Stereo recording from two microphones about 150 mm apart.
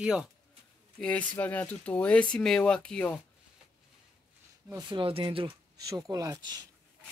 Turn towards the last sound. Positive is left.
turn(degrees=-25)  # may be behind; listen again after turning